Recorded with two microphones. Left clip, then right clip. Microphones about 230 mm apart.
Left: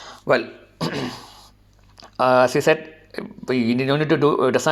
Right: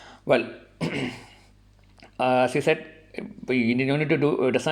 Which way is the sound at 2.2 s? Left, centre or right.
Centre.